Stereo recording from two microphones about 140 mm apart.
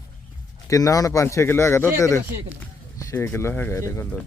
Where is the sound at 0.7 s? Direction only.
25° left (ahead or behind).